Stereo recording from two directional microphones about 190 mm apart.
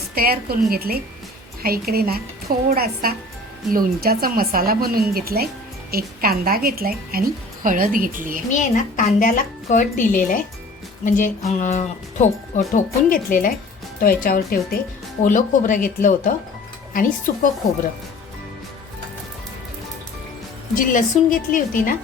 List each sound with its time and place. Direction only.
0.1 s a woman's voice: 55° right (ahead or behind)
8.5 s a woman's voice: 40° left (ahead or behind)
11.0 s a sound: 40° left (ahead or behind)
12.5 s a woman's voice: 45° left (ahead or behind)
20.7 s a woman's voice: 45° left (ahead or behind)